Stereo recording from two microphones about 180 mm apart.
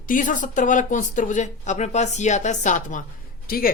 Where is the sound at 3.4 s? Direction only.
55° left (ahead or behind).